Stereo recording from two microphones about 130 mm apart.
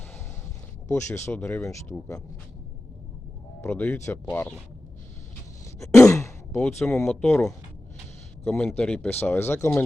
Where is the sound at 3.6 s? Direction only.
15° left (ahead or behind).